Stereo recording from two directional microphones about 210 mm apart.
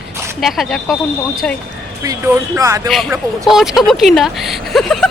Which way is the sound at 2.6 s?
15° right (ahead or behind).